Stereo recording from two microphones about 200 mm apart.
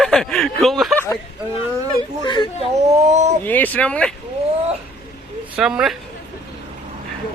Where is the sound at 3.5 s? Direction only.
10° left (ahead or behind).